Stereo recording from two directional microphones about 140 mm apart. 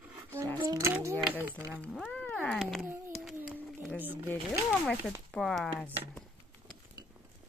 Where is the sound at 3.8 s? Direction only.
10° right (ahead or behind).